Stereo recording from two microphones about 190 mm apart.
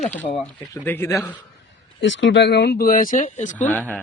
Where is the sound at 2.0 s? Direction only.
75° left (ahead or behind); by 3.6 s 40° left (ahead or behind).